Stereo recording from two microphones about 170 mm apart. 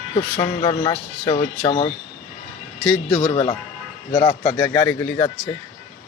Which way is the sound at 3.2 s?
35° left (ahead or behind).